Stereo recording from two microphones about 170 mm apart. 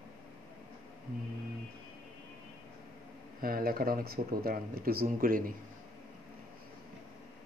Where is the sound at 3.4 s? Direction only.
60° right (ahead or behind).